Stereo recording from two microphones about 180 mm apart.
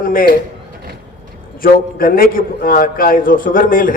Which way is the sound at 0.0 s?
50° left (ahead or behind).